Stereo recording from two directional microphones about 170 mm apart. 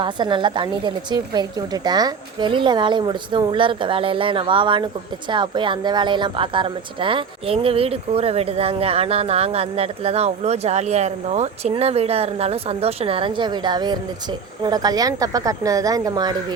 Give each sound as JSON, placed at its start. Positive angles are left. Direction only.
{"t": 0.0, "sound": "a woman's voice", "side_deg": -30}